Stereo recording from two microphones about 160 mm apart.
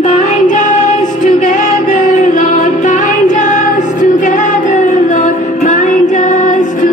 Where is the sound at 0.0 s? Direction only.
50° left (ahead or behind).